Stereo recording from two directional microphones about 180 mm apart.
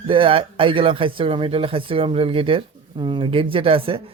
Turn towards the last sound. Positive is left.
turn(degrees=-30)  # may be behind; listen again after turning